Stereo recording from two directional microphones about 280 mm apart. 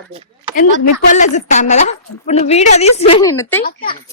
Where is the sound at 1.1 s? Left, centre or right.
Left; by 3.6 s centre.